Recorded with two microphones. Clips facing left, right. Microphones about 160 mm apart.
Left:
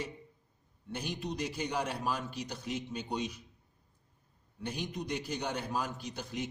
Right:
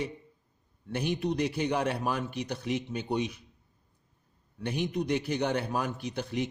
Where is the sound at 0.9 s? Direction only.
60° right (ahead or behind).